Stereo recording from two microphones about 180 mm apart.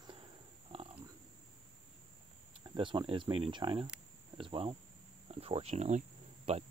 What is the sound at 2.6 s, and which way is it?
Speech, 25° right (ahead or behind).